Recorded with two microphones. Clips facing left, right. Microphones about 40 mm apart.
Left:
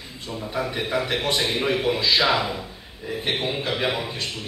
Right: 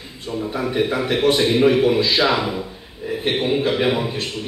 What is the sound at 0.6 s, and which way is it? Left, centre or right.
A man's voice, centre.